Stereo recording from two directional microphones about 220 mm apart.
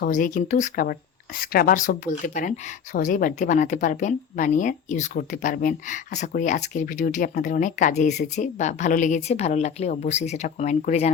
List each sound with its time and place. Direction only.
0.0 s speech: 35° left (ahead or behind)